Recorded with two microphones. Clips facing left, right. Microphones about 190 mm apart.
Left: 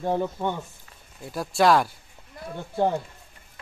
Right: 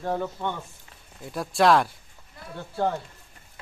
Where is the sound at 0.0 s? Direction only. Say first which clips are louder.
Left 3 dB; 15° left (ahead or behind).